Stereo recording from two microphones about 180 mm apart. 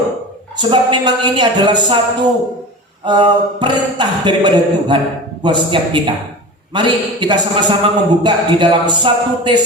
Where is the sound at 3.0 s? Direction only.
25° right (ahead or behind).